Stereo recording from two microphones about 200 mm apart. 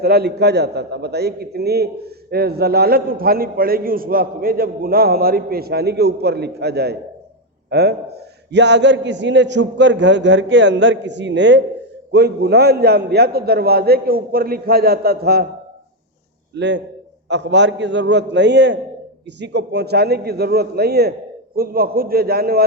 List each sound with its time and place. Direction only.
0.0 s a man's voice: 55° right (ahead or behind)
16.6 s a man's voice: 60° right (ahead or behind)